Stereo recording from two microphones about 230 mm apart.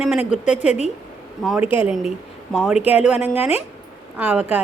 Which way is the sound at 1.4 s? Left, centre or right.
Centre.